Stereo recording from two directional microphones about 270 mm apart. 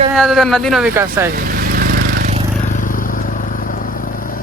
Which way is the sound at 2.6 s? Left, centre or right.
Left.